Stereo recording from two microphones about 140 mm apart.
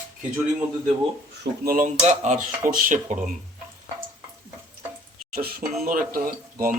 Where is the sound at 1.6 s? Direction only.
90° right.